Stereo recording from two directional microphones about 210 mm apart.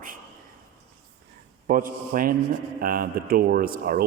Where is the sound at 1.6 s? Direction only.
40° right (ahead or behind).